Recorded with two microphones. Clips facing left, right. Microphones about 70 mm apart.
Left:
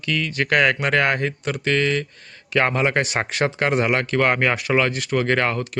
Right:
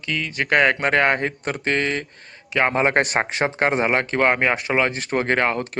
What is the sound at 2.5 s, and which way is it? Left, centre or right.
Speech, centre.